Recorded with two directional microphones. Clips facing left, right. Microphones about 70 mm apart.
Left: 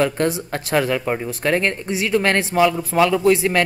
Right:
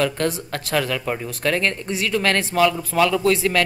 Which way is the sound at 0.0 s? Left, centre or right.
Centre.